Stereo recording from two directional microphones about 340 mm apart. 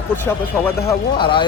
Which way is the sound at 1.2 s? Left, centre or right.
Centre.